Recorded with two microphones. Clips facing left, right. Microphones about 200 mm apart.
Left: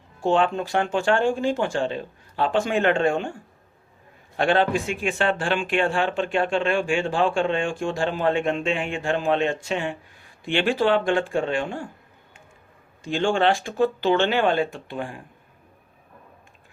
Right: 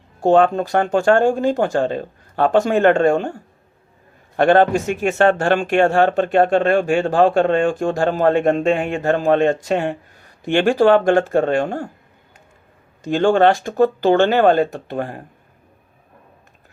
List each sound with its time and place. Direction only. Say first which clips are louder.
0.2 s speech: right 7 dB; 45° right (ahead or behind)
13.0 s speech: right 7 dB; 40° right (ahead or behind)